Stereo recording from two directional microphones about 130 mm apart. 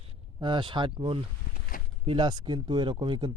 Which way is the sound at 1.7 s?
90° left.